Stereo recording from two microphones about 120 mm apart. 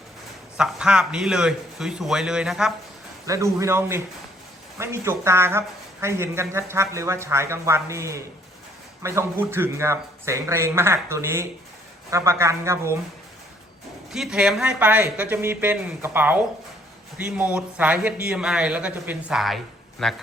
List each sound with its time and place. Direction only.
0.5 s a man's voice: 5° right (ahead or behind)
3.2 s a man's voice: 25° right (ahead or behind)
14.1 s speech: 5° right (ahead or behind)
19.4 s speech: centre (ahead or behind)